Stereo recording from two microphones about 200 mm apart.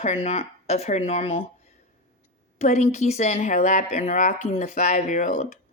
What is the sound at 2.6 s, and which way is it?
Speech, 35° left (ahead or behind).